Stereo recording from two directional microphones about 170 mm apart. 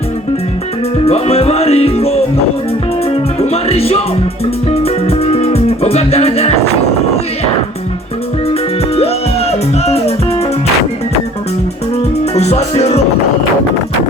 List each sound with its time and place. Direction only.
1.0 s music: 35° left (ahead or behind)
3.4 s music: 35° left (ahead or behind)
9.0 s music: 35° left (ahead or behind)
12.3 s music: 40° left (ahead or behind)